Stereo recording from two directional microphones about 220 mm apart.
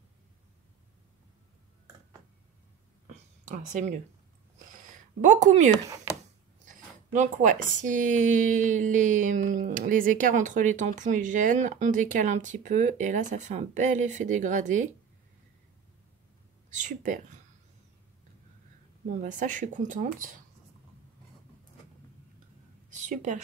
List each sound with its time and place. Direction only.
3.4 s a woman's voice: 35° right (ahead or behind)
5.2 s a woman's voice: 35° right (ahead or behind)
7.1 s a woman's voice: 35° right (ahead or behind)
16.7 s a woman's voice: 35° right (ahead or behind)
19.0 s a woman's voice: 35° right (ahead or behind)
22.8 s a sound: 35° right (ahead or behind)